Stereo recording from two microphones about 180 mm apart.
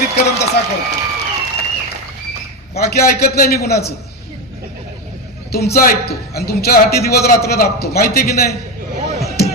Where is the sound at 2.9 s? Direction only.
60° left (ahead or behind).